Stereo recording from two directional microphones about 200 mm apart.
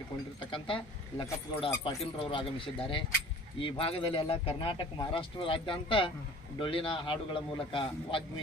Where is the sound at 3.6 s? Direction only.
30° left (ahead or behind).